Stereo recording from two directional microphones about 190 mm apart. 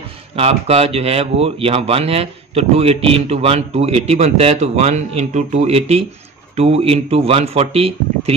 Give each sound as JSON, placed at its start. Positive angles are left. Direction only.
{"t": 0.4, "sound": "speech", "side_deg": -30}